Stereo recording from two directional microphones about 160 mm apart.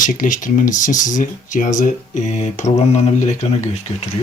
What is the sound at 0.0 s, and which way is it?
Speech, 55° left (ahead or behind).